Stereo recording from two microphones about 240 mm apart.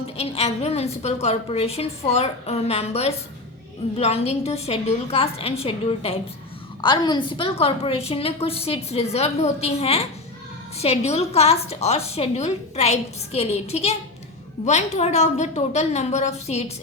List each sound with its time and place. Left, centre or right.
0.2 s a woman's voice: left